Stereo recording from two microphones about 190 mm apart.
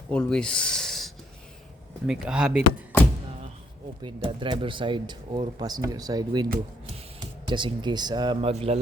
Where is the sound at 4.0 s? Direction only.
25° right (ahead or behind).